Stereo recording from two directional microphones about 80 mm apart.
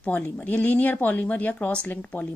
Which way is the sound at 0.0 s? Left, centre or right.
Left.